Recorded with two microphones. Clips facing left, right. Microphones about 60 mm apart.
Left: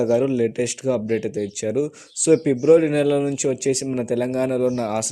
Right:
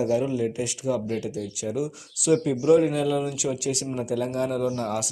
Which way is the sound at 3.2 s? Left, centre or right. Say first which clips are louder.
Left 7 dB; left.